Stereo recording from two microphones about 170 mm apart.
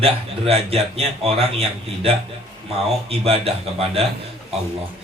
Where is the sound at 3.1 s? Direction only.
35° right (ahead or behind).